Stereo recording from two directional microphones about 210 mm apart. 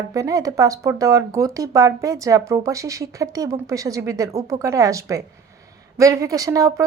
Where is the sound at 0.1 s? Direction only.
15° right (ahead or behind).